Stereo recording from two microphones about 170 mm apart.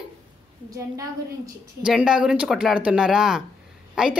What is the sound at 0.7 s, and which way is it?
A woman's voice, 20° right (ahead or behind).